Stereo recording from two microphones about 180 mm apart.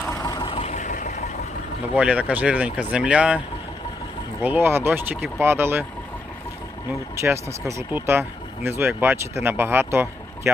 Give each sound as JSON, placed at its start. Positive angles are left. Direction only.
{"t": 0.2, "sound": "vehicle", "side_deg": 20}
{"t": 2.0, "sound": "speech", "side_deg": -5}
{"t": 4.4, "sound": "speech", "side_deg": -10}
{"t": 7.2, "sound": "speech", "side_deg": -15}